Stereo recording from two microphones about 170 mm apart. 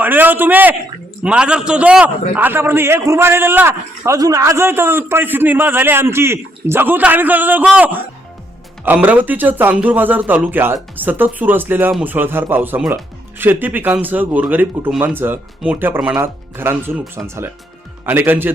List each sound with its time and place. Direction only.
0.0 s a man's voice: 10° right (ahead or behind)